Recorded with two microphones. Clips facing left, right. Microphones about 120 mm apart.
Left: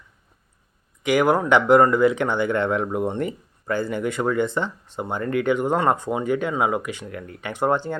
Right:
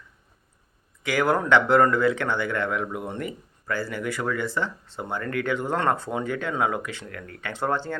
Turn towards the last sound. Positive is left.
turn(degrees=15)  # may be behind; listen again after turning